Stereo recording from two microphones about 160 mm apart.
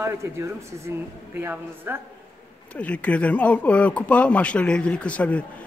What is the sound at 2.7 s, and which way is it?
Speech, 10° left (ahead or behind).